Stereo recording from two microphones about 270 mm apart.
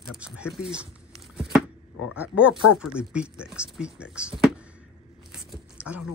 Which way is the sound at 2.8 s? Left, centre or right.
Centre.